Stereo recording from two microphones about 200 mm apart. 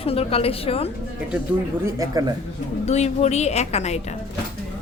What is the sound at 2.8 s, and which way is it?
A woman's voice, 35° left (ahead or behind).